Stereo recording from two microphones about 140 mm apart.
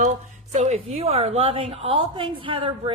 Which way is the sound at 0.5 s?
55° right (ahead or behind).